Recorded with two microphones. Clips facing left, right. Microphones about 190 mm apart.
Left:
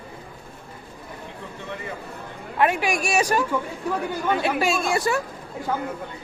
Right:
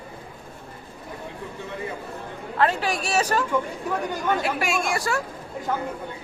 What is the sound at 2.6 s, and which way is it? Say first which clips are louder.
Speech: left 2 dB; 15° left (ahead or behind).